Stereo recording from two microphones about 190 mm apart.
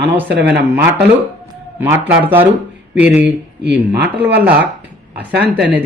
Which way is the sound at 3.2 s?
65° right (ahead or behind).